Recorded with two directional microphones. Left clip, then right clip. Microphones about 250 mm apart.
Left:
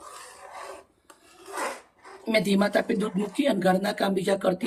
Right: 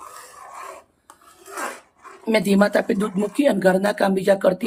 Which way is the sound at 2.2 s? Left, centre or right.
Centre.